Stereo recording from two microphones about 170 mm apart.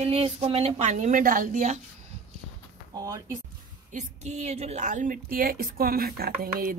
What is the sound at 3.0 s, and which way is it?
Speech, 20° right (ahead or behind).